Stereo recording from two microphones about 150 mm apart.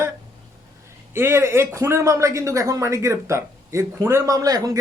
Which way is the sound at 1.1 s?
15° right (ahead or behind).